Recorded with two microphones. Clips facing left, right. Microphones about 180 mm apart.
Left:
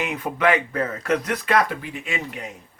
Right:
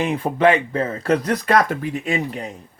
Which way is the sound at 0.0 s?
30° right (ahead or behind).